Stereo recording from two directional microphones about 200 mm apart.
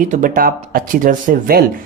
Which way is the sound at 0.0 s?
40° right (ahead or behind).